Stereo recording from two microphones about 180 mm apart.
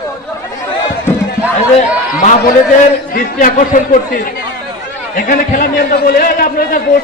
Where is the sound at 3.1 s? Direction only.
50° left (ahead or behind).